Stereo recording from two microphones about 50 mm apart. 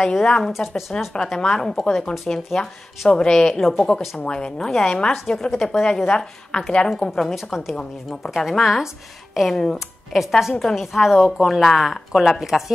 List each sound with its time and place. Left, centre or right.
0.0 s a woman's voice: centre
0.5 s speech: centre
1.1 s a woman's voice: centre
2.2 s a woman's voice: centre
4.2 s a woman's voice: centre
7.5 s speech: centre
9.5 s a woman's voice: centre
9.8 s speech: centre